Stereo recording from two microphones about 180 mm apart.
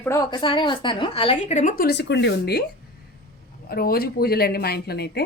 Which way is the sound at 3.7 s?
55° left (ahead or behind).